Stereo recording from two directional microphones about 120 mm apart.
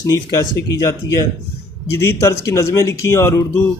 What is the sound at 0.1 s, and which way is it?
A man's voice, 25° left (ahead or behind).